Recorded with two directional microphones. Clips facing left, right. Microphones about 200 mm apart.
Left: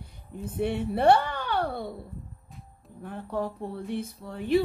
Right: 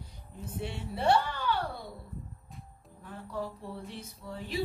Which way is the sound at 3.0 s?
55° left (ahead or behind).